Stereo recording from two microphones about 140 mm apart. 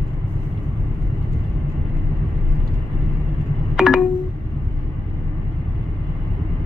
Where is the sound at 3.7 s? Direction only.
5° right (ahead or behind).